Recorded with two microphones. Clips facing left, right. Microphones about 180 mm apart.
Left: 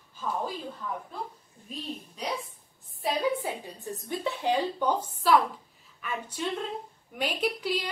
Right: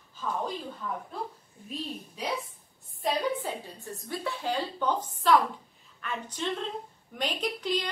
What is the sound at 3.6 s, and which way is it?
A woman's voice, 20° left (ahead or behind).